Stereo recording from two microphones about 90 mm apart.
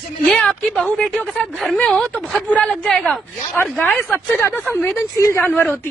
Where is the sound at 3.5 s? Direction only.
20° left (ahead or behind).